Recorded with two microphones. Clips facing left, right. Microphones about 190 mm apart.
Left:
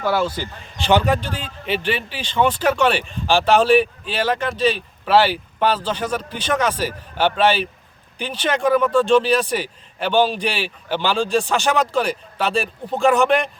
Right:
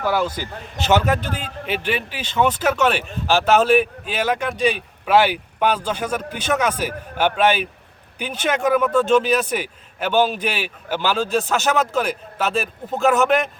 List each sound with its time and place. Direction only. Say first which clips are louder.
0.0 s a man's voice: left 1 dB; 10° right (ahead or behind)
1.3 s a man's voice: left 1 dB; 45° right (ahead or behind)
1.8 s a man's voice: even; 10° right (ahead or behind)